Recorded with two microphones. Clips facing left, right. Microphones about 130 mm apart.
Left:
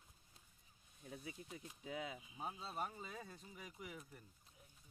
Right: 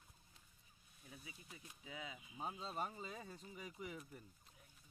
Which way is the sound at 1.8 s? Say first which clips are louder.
Left 5 dB; 50° left (ahead or behind).